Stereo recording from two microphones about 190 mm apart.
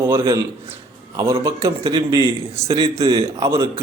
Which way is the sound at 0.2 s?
15° right (ahead or behind).